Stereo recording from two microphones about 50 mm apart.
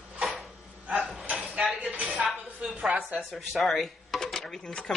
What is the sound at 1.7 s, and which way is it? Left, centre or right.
A woman's voice, right.